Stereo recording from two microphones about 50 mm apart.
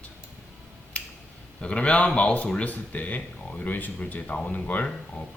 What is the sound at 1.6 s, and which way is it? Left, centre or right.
A man's voice, left.